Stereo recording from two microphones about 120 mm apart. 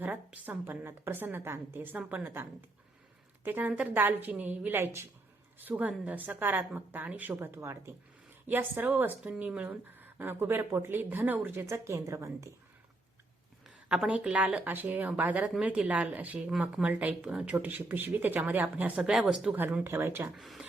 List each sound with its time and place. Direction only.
0.0 s a woman's voice: 15° right (ahead or behind)
13.7 s speech: 5° right (ahead or behind)
19.5 s a woman's voice: 15° right (ahead or behind)
20.3 s speech: centre (ahead or behind)